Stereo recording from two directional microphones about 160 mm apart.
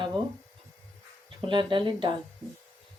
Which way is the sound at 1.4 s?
30° right (ahead or behind).